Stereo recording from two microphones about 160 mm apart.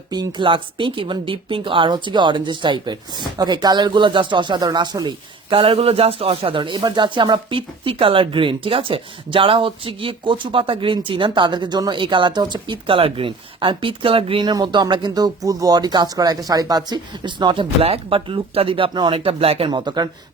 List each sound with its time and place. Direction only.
0.1 s a woman's voice: 30° right (ahead or behind)